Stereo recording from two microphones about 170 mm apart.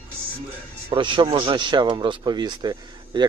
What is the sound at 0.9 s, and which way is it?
Speech, 30° right (ahead or behind).